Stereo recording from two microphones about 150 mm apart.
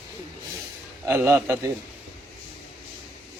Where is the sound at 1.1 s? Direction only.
15° right (ahead or behind).